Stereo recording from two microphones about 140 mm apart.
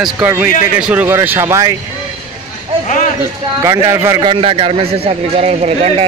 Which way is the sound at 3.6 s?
20° right (ahead or behind).